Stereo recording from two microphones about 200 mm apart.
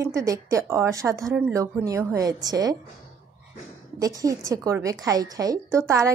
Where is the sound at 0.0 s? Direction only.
15° right (ahead or behind).